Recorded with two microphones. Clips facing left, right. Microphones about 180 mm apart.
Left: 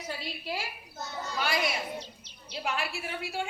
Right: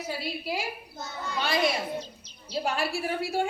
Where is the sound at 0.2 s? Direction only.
10° right (ahead or behind).